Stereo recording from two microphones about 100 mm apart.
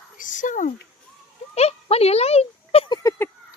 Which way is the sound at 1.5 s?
90° left.